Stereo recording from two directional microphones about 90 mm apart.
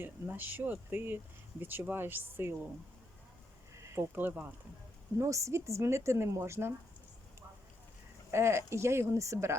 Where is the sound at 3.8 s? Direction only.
35° right (ahead or behind).